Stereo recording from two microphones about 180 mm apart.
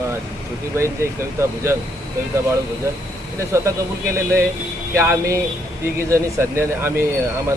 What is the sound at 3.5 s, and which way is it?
Speech, 15° right (ahead or behind).